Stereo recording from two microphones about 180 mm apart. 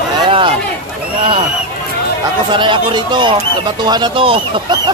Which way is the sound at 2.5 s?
25° right (ahead or behind).